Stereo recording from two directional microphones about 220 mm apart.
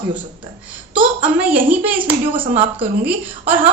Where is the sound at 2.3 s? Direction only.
25° right (ahead or behind).